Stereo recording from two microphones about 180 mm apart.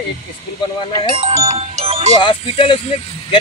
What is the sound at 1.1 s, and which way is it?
Speech, 30° right (ahead or behind).